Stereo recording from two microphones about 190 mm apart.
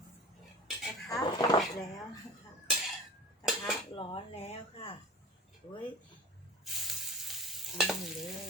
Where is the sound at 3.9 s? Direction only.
30° left (ahead or behind).